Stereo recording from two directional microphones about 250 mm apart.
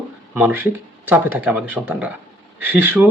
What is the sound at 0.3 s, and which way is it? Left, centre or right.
Speech, centre.